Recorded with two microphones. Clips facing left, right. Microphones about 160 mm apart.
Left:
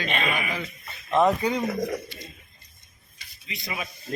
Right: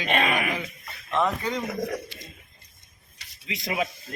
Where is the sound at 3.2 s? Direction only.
90° right.